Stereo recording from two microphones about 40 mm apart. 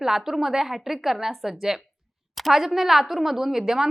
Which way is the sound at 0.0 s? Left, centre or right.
Centre.